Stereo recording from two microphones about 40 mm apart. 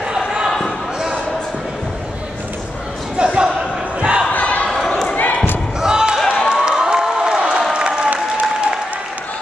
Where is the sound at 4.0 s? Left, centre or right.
Right.